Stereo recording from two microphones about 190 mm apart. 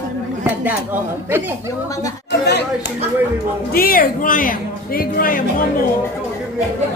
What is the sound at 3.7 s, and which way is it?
Speech, 50° left (ahead or behind).